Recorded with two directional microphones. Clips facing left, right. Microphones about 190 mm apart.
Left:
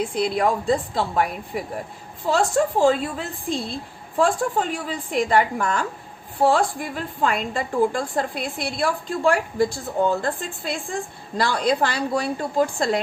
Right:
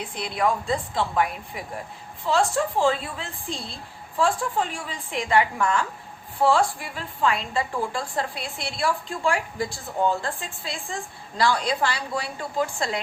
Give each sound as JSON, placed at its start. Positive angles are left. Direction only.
{"t": 0.1, "sound": "a woman's voice", "side_deg": 35}
{"t": 6.4, "sound": "a woman's voice", "side_deg": 50}